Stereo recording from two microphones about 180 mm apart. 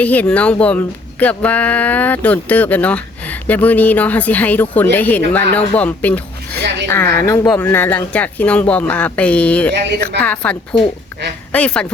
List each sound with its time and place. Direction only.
0.0 s speech: 10° left (ahead or behind)
9.7 s a woman's voice: 65° right (ahead or behind)
10.2 s speech: 10° left (ahead or behind)